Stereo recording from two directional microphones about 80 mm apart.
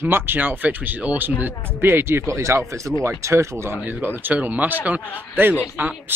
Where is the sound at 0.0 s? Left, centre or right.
Right.